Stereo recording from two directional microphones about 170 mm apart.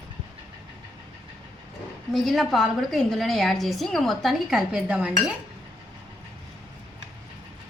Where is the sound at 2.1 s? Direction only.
Centre (ahead or behind).